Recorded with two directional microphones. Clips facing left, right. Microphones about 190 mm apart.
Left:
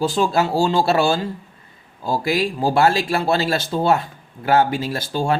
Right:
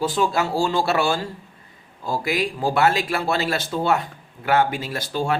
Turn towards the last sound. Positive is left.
turn(degrees=30)  # may be behind; listen again after turning